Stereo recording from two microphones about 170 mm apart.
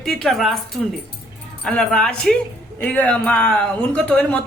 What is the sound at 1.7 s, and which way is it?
A woman's voice, 5° left (ahead or behind).